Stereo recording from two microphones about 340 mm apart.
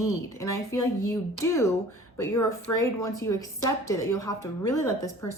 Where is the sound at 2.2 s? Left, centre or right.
Centre.